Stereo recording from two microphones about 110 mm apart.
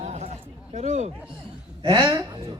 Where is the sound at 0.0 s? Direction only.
90° right.